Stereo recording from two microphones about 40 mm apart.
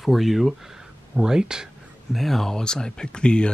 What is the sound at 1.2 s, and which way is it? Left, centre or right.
Speech, centre.